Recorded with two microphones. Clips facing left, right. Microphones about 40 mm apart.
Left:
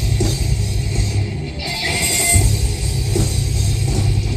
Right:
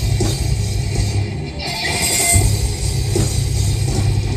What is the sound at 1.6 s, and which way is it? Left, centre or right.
Music, left.